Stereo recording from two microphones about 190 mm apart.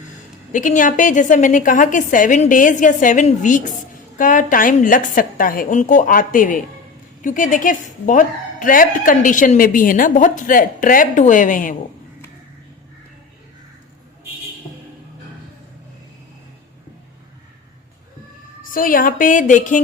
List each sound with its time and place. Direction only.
0.5 s a woman's voice: 45° left (ahead or behind)
18.6 s a woman's voice: 45° left (ahead or behind)